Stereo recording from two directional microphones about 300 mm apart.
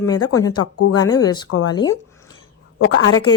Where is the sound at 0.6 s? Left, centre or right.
Left.